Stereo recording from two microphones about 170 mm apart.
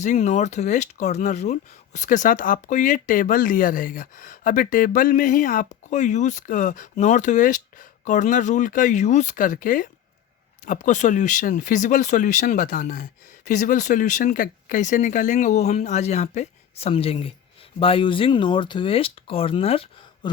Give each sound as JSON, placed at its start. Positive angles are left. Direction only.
{"t": 0.0, "sound": "speech", "side_deg": 45}